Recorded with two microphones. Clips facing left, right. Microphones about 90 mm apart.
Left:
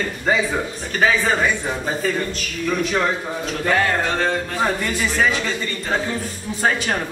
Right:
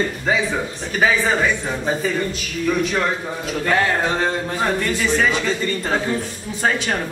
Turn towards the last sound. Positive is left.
turn(degrees=0)  # may be behind; listen again after turning